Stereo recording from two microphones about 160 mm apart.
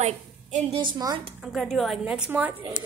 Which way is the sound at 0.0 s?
45° right (ahead or behind).